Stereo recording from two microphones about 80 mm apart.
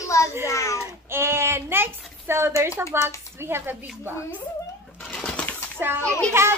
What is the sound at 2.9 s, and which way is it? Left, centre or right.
Speech, right.